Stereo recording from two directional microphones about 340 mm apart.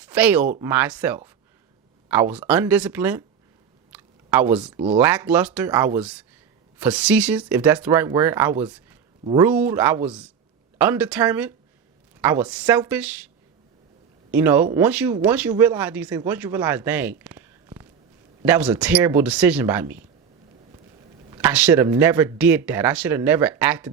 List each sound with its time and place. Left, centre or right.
0.0 s speech: centre
3.9 s a sound: centre
4.9 s speech: centre
14.3 s speech: centre
21.2 s speech: centre